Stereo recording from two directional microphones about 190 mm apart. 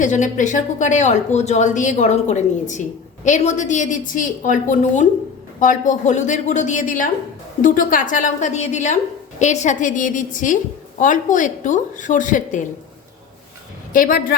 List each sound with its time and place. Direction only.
0.0 s a woman's voice: 40° left (ahead or behind)
13.9 s a woman's voice: 50° left (ahead or behind)